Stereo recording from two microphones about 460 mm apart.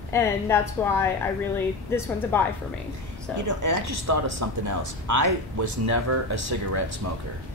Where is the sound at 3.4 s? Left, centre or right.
Right.